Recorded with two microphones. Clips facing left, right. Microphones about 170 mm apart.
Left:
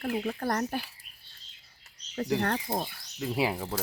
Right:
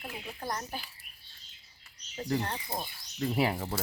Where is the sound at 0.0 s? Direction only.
65° left (ahead or behind).